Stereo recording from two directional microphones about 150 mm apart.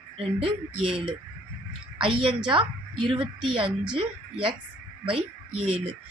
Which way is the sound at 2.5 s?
35° right (ahead or behind).